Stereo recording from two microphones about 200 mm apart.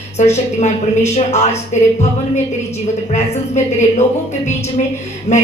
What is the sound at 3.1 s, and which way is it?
A woman's voice, 35° left (ahead or behind).